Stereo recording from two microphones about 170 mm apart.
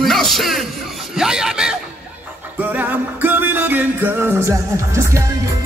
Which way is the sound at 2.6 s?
10° right (ahead or behind).